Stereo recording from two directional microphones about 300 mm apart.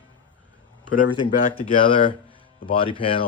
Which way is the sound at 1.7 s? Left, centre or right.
Centre.